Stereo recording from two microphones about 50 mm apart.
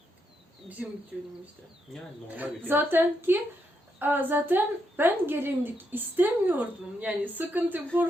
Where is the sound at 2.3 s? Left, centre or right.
Right.